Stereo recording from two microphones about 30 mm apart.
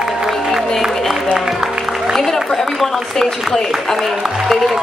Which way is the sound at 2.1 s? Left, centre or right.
Centre.